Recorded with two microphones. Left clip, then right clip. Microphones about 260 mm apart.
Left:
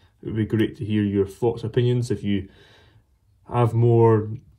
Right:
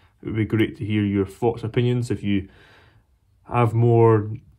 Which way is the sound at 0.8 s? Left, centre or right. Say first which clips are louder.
Left 1 dB; right.